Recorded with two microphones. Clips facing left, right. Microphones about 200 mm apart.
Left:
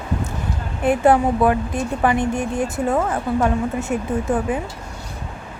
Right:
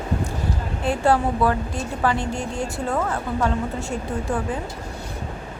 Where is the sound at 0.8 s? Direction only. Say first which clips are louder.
Left 5 dB; 20° left (ahead or behind).